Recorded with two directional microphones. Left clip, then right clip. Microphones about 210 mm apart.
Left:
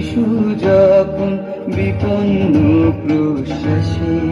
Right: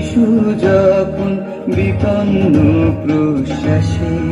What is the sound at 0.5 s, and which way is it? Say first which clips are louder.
Music: left 3 dB; 35° right (ahead or behind).